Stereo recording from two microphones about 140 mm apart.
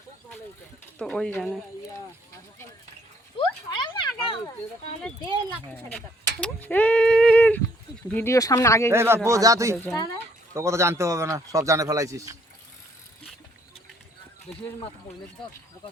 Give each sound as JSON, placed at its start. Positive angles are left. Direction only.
{"t": 0.9, "sound": "speech", "side_deg": 5}
{"t": 3.3, "sound": "a sound", "side_deg": 35}
{"t": 6.4, "sound": "speech", "side_deg": 10}
{"t": 8.9, "sound": "speech", "side_deg": -20}